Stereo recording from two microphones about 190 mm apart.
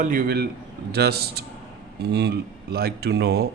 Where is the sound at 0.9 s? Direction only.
55° right (ahead or behind).